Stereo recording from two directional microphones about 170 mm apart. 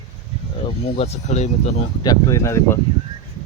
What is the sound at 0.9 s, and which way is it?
Speech, 40° left (ahead or behind).